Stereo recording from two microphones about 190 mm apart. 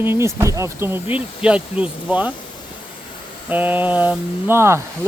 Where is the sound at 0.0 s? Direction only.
15° right (ahead or behind).